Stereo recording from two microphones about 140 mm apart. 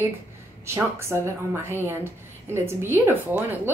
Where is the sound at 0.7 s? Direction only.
20° right (ahead or behind).